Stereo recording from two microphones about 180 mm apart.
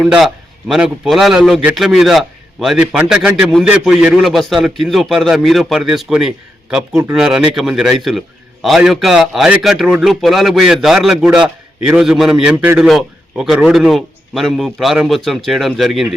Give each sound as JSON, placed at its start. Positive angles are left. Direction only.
{"t": 0.0, "sound": "a man's voice", "side_deg": -5}